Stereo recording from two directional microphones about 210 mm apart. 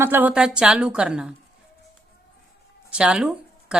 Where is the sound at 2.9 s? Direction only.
5° right (ahead or behind).